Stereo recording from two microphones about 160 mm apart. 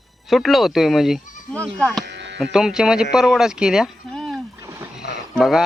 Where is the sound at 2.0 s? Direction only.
90° right.